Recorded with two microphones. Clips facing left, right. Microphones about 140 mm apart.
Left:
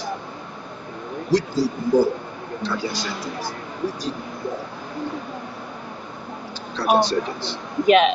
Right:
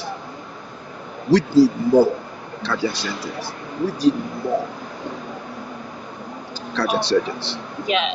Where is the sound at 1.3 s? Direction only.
70° right (ahead or behind).